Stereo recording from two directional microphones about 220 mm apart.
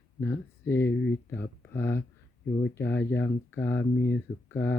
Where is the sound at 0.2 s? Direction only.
10° left (ahead or behind).